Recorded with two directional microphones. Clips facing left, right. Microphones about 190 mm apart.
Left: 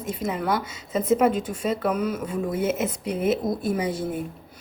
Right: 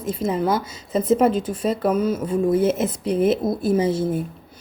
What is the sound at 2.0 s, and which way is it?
Speech, 25° right (ahead or behind).